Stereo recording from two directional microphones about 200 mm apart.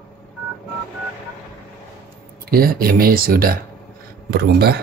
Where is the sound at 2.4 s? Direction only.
50° right (ahead or behind).